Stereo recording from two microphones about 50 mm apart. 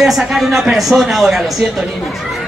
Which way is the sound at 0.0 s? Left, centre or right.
Centre.